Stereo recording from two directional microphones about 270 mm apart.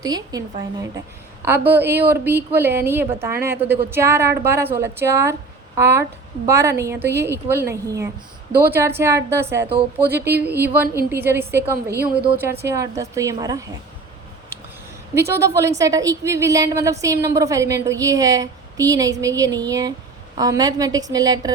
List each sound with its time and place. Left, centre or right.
0.0 s speech: centre
10.2 s speech: right
10.6 s speech: centre
15.3 s speech: centre